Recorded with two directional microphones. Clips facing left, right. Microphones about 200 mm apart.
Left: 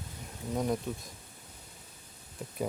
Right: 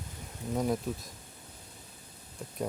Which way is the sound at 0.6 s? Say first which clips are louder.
Right 1 dB; centre (ahead or behind).